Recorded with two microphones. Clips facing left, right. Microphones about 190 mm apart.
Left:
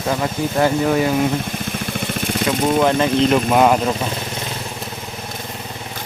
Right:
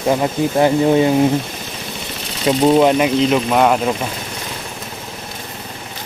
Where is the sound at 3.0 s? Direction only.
5° right (ahead or behind).